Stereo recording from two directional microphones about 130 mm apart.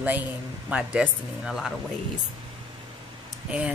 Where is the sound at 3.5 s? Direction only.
10° right (ahead or behind).